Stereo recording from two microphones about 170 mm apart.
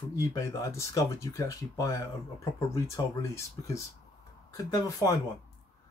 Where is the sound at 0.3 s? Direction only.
20° left (ahead or behind).